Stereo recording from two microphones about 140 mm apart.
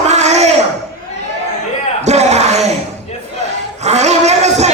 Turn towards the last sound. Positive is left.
turn(degrees=-55)  # may be behind; listen again after turning